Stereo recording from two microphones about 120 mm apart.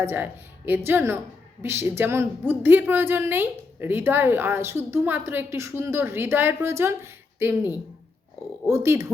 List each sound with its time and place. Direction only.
0.0 s a woman's voice: 20° right (ahead or behind)